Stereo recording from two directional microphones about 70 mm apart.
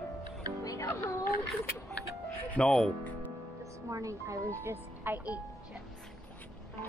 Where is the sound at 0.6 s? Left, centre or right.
Left.